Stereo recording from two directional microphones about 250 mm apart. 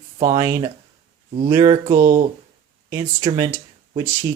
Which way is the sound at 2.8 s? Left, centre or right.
Centre.